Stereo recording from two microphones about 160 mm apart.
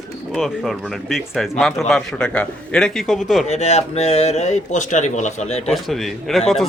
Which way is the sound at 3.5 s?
45° left (ahead or behind).